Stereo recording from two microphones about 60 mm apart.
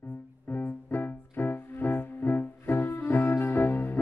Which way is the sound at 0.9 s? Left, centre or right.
Left.